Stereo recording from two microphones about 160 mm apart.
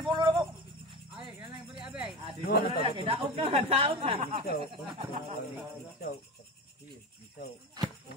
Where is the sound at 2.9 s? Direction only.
35° right (ahead or behind).